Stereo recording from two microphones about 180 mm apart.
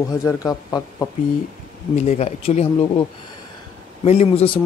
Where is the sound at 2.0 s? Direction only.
40° left (ahead or behind).